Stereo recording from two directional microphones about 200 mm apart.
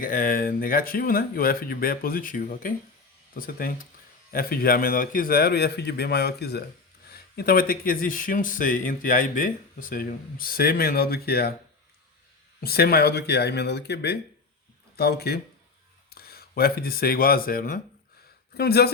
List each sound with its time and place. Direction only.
0.0 s speech: 45° left (ahead or behind)
12.6 s speech: 50° left (ahead or behind)